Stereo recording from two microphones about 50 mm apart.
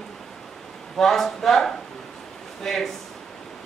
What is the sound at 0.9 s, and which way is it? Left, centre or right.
Speech, centre.